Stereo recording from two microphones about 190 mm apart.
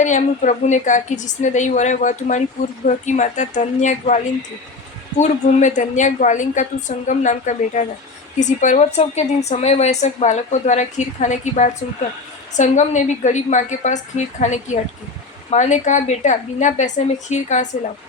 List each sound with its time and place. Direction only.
0.0 s a woman's voice: 40° left (ahead or behind)
5.2 s a woman's voice: 40° left (ahead or behind)